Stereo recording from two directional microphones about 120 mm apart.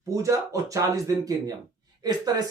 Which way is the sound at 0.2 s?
25° right (ahead or behind).